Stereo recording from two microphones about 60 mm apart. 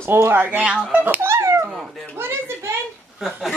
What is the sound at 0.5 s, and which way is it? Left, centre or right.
Speech, centre.